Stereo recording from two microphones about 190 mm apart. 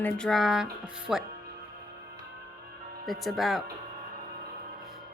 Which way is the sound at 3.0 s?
Centre (ahead or behind).